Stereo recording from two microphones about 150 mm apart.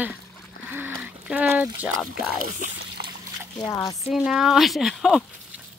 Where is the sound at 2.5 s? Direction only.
55° right (ahead or behind).